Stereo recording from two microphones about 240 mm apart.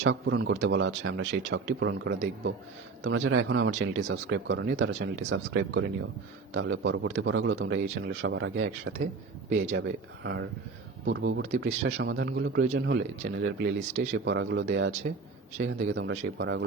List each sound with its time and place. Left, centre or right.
0.0 s a man's voice: right
13.7 s speech: right
14.1 s a man's voice: right